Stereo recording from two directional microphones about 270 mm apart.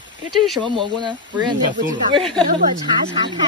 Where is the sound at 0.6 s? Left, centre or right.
Centre.